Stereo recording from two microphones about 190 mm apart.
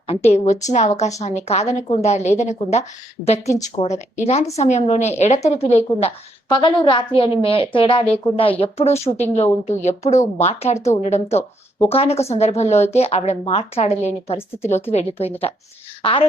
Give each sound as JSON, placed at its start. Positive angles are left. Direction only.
{"t": 0.1, "sound": "a woman's voice", "side_deg": 35}
{"t": 3.4, "sound": "speech", "side_deg": 15}
{"t": 4.5, "sound": "a woman's voice", "side_deg": 35}